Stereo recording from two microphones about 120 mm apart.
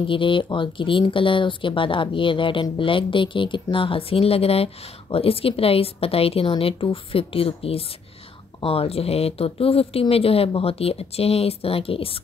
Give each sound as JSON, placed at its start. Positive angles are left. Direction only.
{"t": 0.0, "sound": "speech", "side_deg": 45}